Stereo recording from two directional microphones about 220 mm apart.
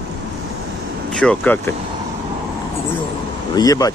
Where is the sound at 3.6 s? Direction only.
15° left (ahead or behind).